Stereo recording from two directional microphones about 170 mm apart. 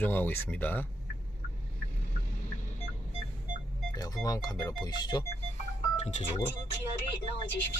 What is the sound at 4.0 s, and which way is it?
Speech, 20° left (ahead or behind).